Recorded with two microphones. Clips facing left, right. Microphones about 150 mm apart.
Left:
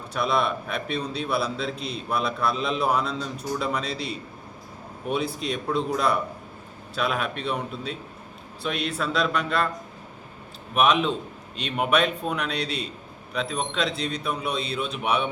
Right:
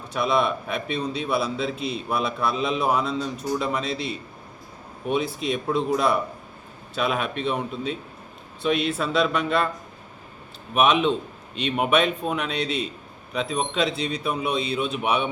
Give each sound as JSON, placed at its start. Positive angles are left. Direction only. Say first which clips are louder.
{"t": 0.1, "sound": "a man's voice", "louder": "right 2 dB", "side_deg": 0}
{"t": 10.8, "sound": "a man's voice", "louder": "right 2 dB", "side_deg": 0}